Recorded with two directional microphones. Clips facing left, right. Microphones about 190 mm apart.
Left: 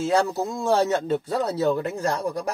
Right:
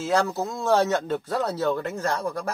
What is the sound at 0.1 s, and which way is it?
Speech, 10° left (ahead or behind).